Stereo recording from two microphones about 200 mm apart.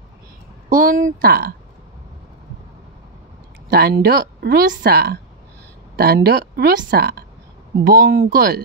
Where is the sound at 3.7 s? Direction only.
55° right (ahead or behind).